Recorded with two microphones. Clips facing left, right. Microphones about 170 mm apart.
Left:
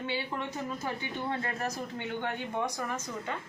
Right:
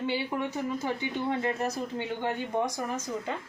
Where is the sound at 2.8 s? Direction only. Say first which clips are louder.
Right 3 dB; 20° right (ahead or behind).